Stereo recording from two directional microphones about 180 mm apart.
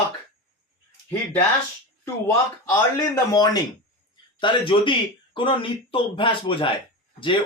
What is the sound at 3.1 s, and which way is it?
Speech, 20° left (ahead or behind).